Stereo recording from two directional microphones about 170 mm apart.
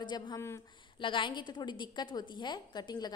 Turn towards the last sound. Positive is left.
turn(degrees=25)  # may be behind; listen again after turning